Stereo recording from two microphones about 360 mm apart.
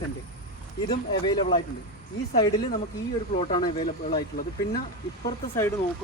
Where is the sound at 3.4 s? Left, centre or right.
Centre.